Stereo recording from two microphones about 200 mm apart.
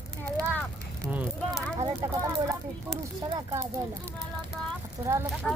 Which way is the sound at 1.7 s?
20° right (ahead or behind).